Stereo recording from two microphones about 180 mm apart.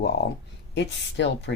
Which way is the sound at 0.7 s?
75° left (ahead or behind).